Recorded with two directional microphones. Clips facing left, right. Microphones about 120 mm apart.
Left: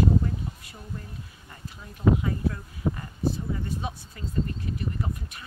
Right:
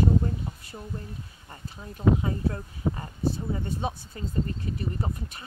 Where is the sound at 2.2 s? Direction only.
30° right (ahead or behind).